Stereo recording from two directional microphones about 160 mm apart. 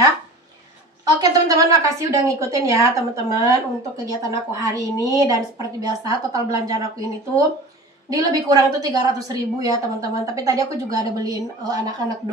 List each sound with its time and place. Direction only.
1.2 s a woman's voice: 20° right (ahead or behind)